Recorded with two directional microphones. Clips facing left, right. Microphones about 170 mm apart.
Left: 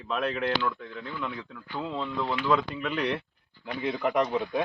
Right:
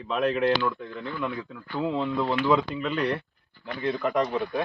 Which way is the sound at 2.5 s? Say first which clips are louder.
Right 2 dB; centre (ahead or behind).